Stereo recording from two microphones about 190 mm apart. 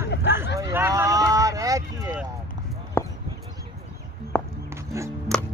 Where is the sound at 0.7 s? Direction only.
15° right (ahead or behind).